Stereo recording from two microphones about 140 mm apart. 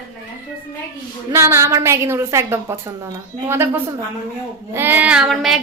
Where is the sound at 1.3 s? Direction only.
20° right (ahead or behind).